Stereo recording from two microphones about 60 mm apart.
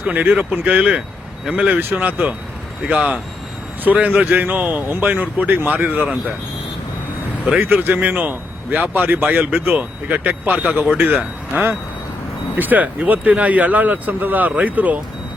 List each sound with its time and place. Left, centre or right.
0.0 s speech: right
7.6 s speech: right